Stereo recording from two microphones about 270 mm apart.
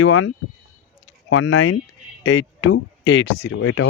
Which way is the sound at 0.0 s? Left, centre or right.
Left.